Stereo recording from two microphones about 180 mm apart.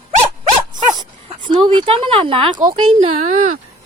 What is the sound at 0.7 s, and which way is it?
Dog, 25° right (ahead or behind).